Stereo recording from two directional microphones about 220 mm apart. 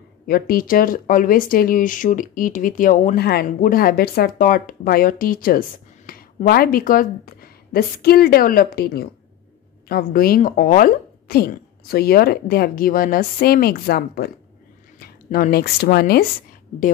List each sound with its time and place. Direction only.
0.3 s speech: 40° left (ahead or behind)